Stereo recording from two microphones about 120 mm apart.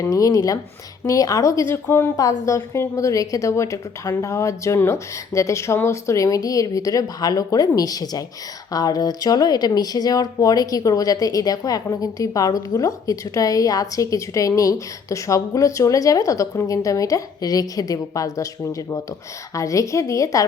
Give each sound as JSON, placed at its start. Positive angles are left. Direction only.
{"t": 0.0, "sound": "speech", "side_deg": 30}
{"t": 2.1, "sound": "speech", "side_deg": 30}